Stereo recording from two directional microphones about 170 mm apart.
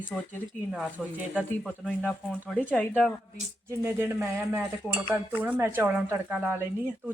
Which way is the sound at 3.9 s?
15° right (ahead or behind).